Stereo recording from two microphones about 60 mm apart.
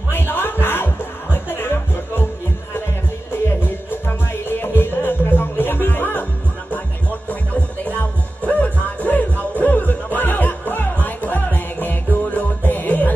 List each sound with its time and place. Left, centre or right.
0.1 s music: left
3.6 s music: left